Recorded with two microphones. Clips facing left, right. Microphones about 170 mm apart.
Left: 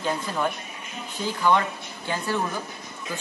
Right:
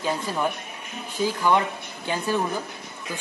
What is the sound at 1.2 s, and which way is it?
A man's voice, 10° right (ahead or behind).